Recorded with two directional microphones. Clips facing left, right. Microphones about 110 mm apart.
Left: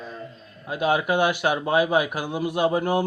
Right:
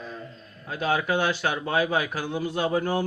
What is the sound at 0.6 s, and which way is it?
A man's voice, 15° left (ahead or behind).